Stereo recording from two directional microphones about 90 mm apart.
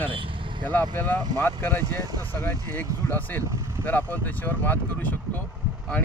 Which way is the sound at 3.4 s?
35° right (ahead or behind).